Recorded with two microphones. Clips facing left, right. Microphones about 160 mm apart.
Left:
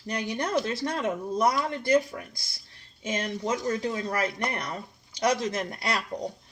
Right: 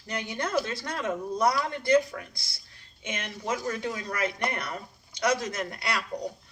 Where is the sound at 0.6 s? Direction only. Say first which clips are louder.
Left 4 dB; 30° left (ahead or behind).